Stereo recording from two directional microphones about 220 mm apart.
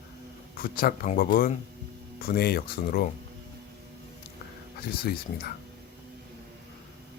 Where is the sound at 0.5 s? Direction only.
40° left (ahead or behind).